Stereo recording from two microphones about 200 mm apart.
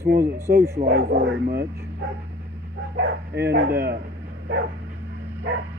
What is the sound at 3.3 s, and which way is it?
Speech, 55° right (ahead or behind).